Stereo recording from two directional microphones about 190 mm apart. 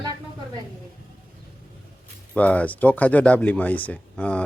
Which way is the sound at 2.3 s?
10° left (ahead or behind).